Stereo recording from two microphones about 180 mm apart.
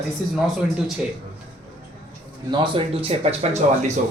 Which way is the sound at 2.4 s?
25° right (ahead or behind).